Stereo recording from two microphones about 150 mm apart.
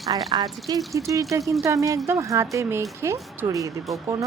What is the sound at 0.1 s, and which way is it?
Speech, 30° right (ahead or behind).